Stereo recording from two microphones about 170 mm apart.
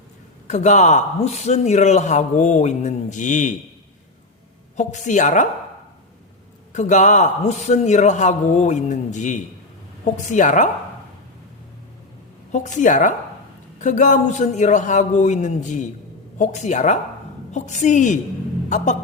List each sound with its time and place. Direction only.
0.4 s a man's voice: 45° left (ahead or behind)
4.8 s a man's voice: 45° left (ahead or behind)
6.7 s a man's voice: 45° left (ahead or behind)
12.5 s a man's voice: 45° left (ahead or behind)